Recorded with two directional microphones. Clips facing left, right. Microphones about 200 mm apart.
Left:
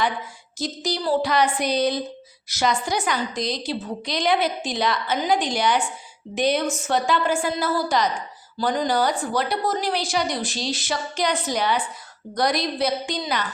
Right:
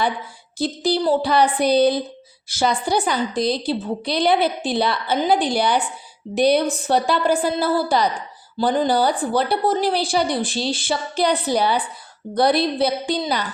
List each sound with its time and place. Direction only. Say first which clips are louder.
0.6 s a woman's voice: right 6 dB; 30° right (ahead or behind)